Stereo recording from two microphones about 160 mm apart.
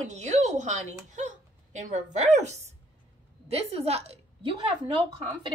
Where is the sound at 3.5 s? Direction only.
40° right (ahead or behind).